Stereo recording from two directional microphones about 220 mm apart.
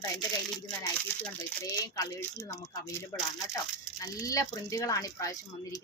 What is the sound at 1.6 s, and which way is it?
Speech, 15° left (ahead or behind).